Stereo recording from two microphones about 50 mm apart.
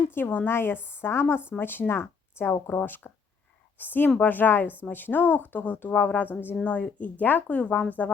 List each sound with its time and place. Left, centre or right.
0.1 s a woman's voice: left
1.5 s a woman's voice: left
1.9 s speech: left
2.6 s a woman's voice: left